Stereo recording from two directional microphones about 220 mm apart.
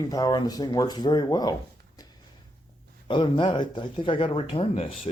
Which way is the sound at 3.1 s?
20° left (ahead or behind).